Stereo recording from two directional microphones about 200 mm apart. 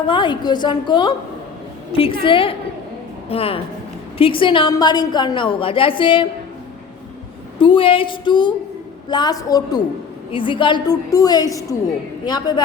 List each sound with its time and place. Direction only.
0.1 s a woman's voice: 25° left (ahead or behind)
7.6 s a woman's voice: 25° left (ahead or behind)